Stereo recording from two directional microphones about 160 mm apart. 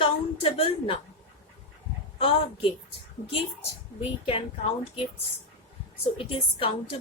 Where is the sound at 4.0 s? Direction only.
35° left (ahead or behind).